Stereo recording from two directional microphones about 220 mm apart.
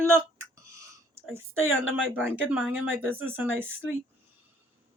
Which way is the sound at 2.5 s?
5° right (ahead or behind).